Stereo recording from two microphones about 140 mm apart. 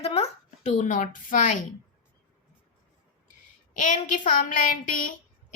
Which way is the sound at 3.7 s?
65° left (ahead or behind).